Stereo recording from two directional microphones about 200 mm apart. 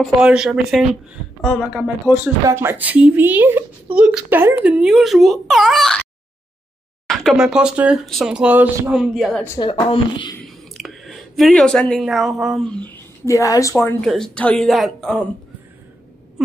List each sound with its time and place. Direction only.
0.0 s a woman's voice: 5° right (ahead or behind)
7.1 s a woman's voice: centre (ahead or behind)
9.6 s a woman's voice: 25° left (ahead or behind)
10.4 s speech: centre (ahead or behind)
13.3 s a woman's voice: 15° left (ahead or behind)
14.0 s a woman's voice: centre (ahead or behind)